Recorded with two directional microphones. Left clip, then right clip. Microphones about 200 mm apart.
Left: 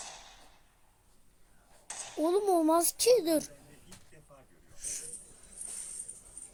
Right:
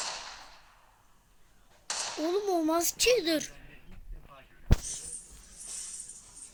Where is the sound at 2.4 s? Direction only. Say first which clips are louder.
Left 2 dB; 10° left (ahead or behind).